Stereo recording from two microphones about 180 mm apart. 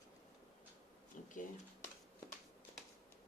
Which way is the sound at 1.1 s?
45° left (ahead or behind).